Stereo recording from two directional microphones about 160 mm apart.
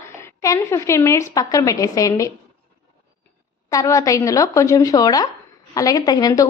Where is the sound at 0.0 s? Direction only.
15° left (ahead or behind).